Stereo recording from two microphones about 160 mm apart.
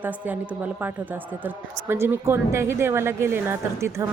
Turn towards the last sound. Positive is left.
turn(degrees=-15)  # may be behind; listen again after turning